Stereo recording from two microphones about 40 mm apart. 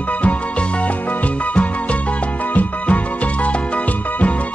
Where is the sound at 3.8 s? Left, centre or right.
Left.